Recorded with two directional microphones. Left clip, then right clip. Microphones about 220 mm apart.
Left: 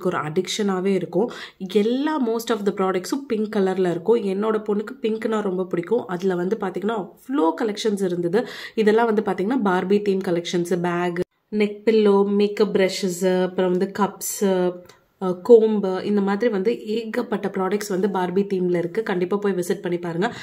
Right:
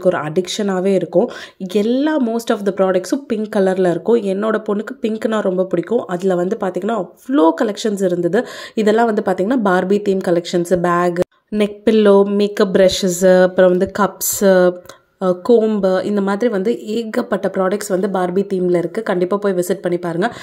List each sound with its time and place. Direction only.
0.0 s a woman's voice: 15° right (ahead or behind)